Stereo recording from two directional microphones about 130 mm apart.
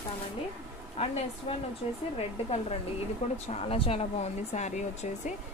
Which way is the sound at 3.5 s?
45° left (ahead or behind).